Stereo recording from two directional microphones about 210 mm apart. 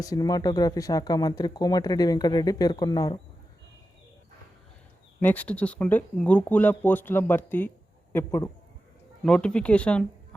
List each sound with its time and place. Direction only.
0.0 s speech: 15° left (ahead or behind)
5.2 s speech: 5° left (ahead or behind)